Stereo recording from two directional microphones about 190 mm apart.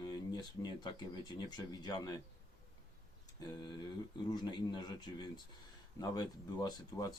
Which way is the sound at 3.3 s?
20° left (ahead or behind).